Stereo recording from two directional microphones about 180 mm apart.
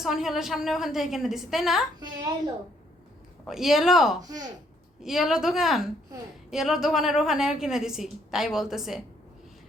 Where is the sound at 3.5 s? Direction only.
Centre (ahead or behind).